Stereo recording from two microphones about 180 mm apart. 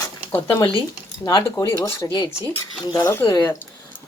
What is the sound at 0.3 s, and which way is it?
Speech, 10° left (ahead or behind).